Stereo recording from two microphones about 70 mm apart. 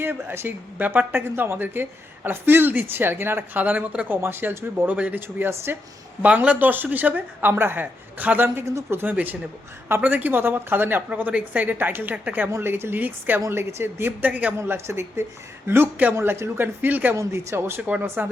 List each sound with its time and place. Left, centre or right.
0.0 s speech: right
6.2 s speech: right
8.6 s speech: right
12.5 s speech: right
13.5 s speech: right
14.7 s speech: right
17.2 s speech: right